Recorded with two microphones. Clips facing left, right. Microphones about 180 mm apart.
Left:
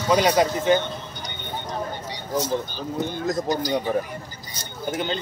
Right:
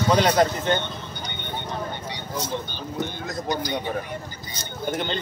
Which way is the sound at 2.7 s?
35° left (ahead or behind).